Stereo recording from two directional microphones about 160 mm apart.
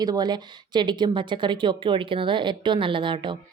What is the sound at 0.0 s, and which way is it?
A woman's voice, 25° right (ahead or behind).